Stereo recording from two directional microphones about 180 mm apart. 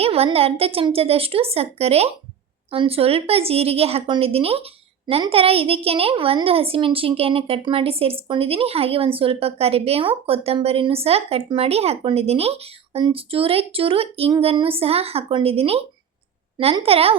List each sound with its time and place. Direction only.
0.0 s a woman's voice: 35° right (ahead or behind)